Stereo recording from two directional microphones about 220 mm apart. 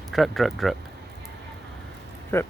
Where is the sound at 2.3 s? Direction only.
10° left (ahead or behind).